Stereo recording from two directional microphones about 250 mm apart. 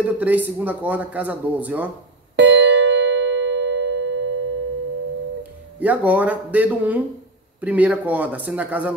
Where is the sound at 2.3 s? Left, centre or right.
Right.